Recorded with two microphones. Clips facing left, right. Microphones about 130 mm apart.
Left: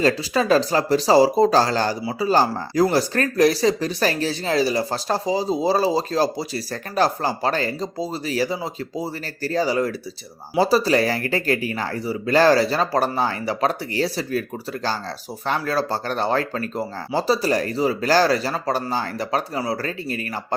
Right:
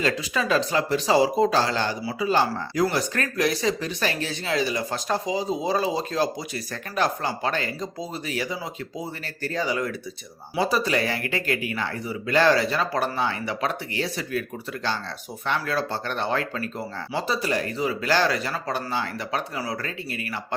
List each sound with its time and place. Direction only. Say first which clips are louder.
0.0 s speech: left 5 dB; 35° left (ahead or behind)
15.4 s speech: left 4 dB; 35° left (ahead or behind)